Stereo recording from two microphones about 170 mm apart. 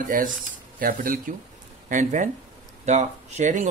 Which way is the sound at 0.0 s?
55° right (ahead or behind).